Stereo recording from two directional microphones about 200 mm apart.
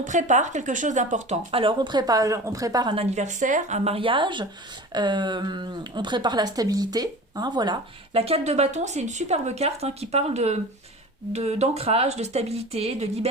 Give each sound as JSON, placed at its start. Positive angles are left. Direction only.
{"t": 0.0, "sound": "a woman's voice", "side_deg": -40}